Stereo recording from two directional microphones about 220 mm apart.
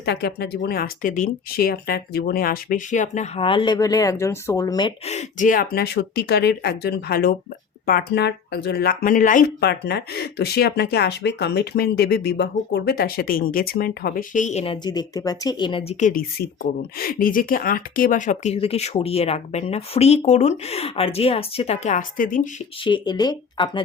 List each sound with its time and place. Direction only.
0.0 s speech: 50° left (ahead or behind)
22.8 s speech: 20° left (ahead or behind)